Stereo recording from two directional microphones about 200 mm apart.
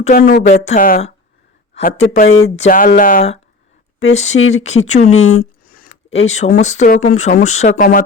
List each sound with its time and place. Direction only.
0.0 s speech: 45° left (ahead or behind)
0.5 s speech: 30° left (ahead or behind)
5.1 s speech: 85° left
5.9 s a sound: 75° left (ahead or behind)
6.2 s speech: 35° left (ahead or behind)